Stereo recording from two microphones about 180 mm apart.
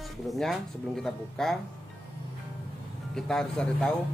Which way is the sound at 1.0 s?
Centre (ahead or behind).